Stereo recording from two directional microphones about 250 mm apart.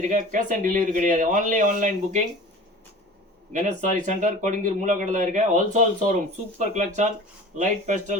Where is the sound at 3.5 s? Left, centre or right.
Right.